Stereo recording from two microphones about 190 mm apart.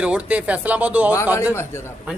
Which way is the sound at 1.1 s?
15° left (ahead or behind).